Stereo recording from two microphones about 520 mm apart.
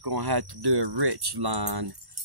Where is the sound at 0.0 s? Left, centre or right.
Right.